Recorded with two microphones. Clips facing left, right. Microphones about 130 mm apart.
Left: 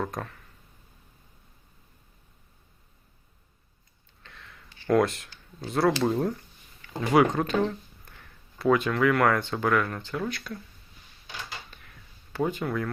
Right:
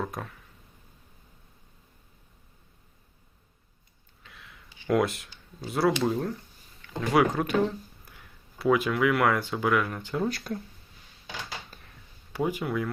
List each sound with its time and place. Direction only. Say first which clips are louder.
0.0 s speech: left 2 dB; 5° right (ahead or behind)
4.2 s a sound: left 1 dB; 5° right (ahead or behind)
6.8 s speech: left 2 dB; centre (ahead or behind)
7.4 s speech: even; 15° right (ahead or behind)
10.2 s speech: right 3 dB; 40° right (ahead or behind)
11.7 s a sound: right 2 dB; 35° right (ahead or behind)
12.3 s speech: even; 10° right (ahead or behind)